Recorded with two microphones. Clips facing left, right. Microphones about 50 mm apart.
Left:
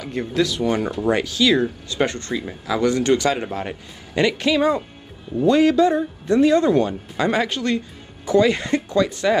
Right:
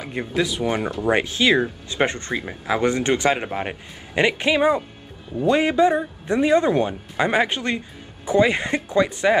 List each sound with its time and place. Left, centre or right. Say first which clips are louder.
0.0 s speech: left 2 dB; centre
1.1 s speech: right 1 dB; right